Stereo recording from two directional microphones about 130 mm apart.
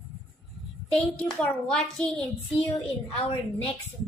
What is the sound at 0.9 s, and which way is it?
A child's voice, 5° left (ahead or behind).